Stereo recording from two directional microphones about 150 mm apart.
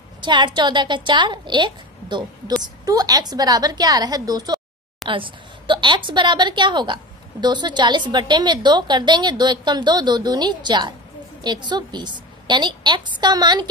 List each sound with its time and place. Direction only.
0.2 s a woman's voice: 30° right (ahead or behind)